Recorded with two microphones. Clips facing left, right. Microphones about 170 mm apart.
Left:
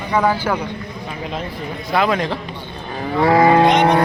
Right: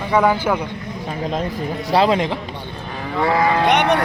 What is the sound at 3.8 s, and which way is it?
Speech, 75° right (ahead or behind).